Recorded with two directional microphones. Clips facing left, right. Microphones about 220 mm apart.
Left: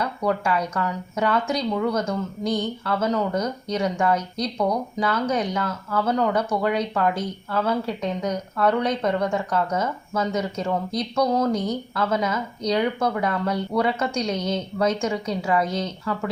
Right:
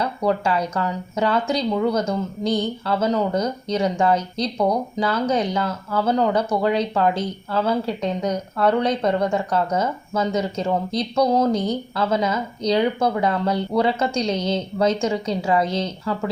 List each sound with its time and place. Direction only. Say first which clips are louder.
0.0 s speech: right 3 dB; 30° right (ahead or behind)